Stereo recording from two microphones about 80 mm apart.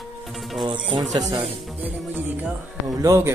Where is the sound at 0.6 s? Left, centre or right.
Right.